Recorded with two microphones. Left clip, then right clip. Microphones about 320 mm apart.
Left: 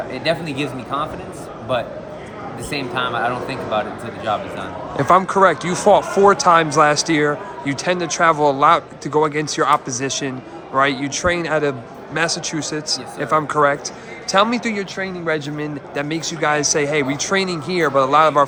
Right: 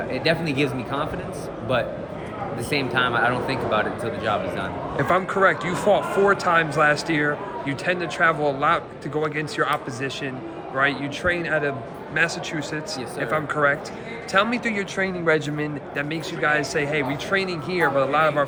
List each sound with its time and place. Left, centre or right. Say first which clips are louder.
0.1 s a man's voice: even; centre
2.6 s a man's voice: even; centre
4.9 s a man's voice: left 7 dB; centre